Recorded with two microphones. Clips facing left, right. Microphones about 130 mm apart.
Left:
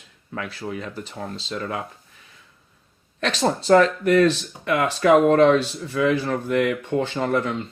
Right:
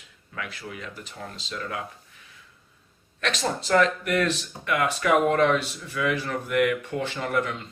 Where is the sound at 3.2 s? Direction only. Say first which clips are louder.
Left 5 dB; 35° left (ahead or behind).